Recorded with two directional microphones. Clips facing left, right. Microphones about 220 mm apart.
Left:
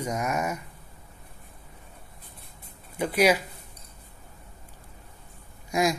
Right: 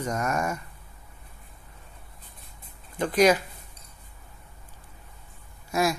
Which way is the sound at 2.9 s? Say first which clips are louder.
Right 2 dB; 10° left (ahead or behind).